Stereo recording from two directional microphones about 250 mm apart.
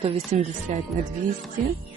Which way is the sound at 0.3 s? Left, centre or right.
Right.